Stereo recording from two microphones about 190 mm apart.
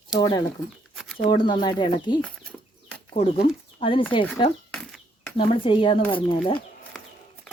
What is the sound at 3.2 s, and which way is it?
Speech, 30° left (ahead or behind).